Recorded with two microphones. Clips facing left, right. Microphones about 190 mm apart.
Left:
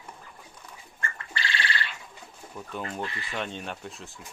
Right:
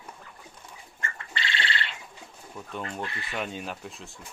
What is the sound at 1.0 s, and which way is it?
Bird, 20° right (ahead or behind).